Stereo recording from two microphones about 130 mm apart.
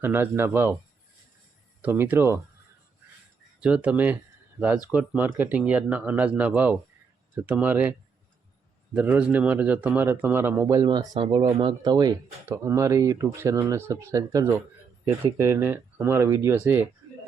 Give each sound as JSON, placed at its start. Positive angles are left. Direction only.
{"t": 0.0, "sound": "a man's voice", "side_deg": -15}
{"t": 1.8, "sound": "a man's voice", "side_deg": -15}
{"t": 3.6, "sound": "a man's voice", "side_deg": -10}